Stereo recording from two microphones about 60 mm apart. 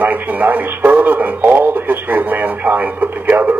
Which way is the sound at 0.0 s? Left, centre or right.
Right.